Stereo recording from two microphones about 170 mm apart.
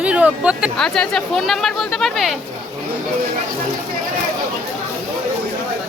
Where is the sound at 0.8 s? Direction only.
5° left (ahead or behind).